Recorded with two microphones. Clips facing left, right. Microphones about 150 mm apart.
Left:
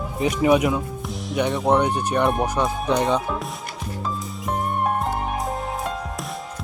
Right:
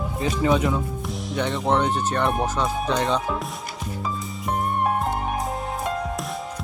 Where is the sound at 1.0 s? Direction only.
Centre (ahead or behind).